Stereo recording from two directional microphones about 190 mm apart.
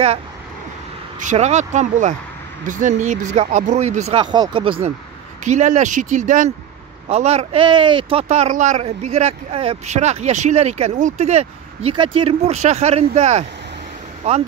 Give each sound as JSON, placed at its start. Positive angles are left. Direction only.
{"t": 1.2, "sound": "speech", "side_deg": -35}
{"t": 5.4, "sound": "speech", "side_deg": -40}